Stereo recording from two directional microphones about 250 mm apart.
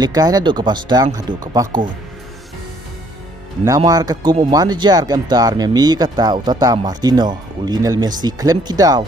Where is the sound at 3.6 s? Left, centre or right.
Centre.